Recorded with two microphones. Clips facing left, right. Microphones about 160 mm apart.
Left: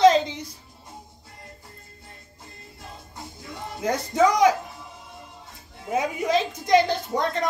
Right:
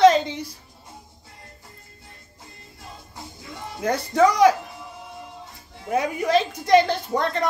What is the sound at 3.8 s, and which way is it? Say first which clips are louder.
Speech: right 2 dB; 20° left (ahead or behind).